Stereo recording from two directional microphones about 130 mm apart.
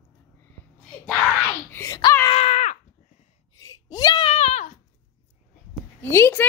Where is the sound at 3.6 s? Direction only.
30° left (ahead or behind).